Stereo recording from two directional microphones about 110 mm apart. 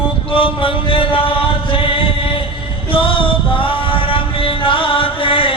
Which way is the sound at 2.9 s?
55° left (ahead or behind).